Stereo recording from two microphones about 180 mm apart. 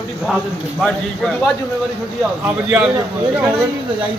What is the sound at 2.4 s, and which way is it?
Speech, 10° right (ahead or behind).